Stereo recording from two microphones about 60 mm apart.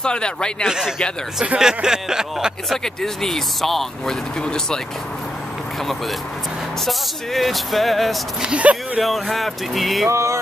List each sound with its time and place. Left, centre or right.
0.0 s speech: centre
0.7 s speech: centre
2.7 s speech: centre
6.9 s speech: centre
8.4 s speech: centre
9.0 s speech: centre
10.0 s music: right